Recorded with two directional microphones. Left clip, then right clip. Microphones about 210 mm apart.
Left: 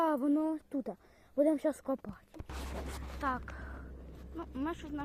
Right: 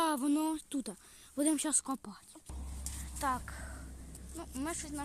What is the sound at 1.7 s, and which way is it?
Speech, 5° right (ahead or behind).